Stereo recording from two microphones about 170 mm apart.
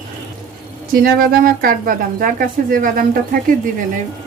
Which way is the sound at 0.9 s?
60° right (ahead or behind).